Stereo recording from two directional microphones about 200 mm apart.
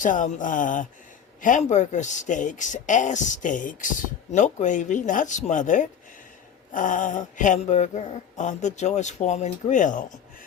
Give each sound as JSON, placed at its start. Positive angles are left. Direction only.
{"t": 0.0, "sound": "speech", "side_deg": 40}